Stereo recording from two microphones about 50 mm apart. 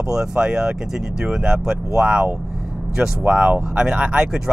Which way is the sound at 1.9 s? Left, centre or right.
Centre.